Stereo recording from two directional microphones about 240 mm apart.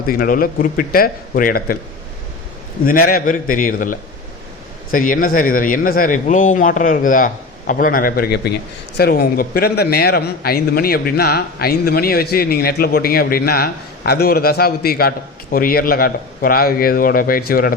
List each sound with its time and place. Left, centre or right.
0.0 s a man's voice: left
2.8 s a man's voice: left